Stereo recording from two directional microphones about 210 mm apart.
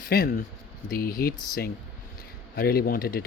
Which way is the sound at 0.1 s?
45° left (ahead or behind).